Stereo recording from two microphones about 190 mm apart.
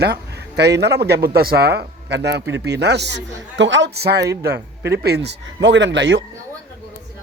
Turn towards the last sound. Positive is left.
turn(degrees=-75)  # may be behind; listen again after turning